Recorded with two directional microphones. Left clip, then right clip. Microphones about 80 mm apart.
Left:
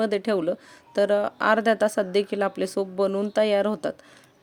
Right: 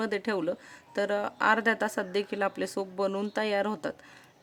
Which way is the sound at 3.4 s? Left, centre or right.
Left.